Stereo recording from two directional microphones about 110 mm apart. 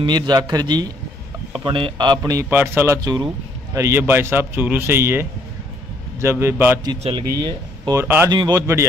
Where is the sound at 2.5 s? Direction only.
20° right (ahead or behind).